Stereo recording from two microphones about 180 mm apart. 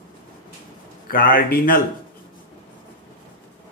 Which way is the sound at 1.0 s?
50° left (ahead or behind).